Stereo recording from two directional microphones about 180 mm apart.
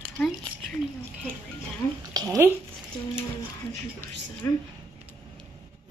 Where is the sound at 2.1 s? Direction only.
20° right (ahead or behind).